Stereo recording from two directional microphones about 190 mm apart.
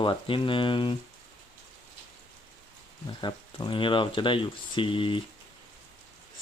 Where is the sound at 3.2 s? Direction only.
25° left (ahead or behind).